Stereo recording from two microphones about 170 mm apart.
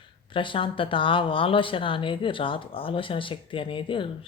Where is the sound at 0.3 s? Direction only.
30° left (ahead or behind).